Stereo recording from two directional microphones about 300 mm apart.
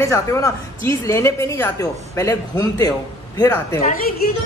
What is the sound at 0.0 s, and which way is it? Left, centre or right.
A woman's voice, centre.